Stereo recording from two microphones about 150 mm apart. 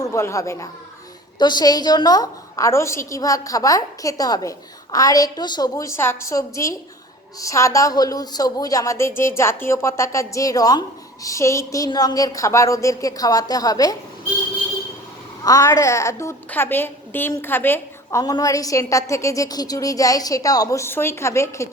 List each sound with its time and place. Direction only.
0.0 s a woman's voice: 20° left (ahead or behind)
15.4 s a woman's voice: 25° left (ahead or behind)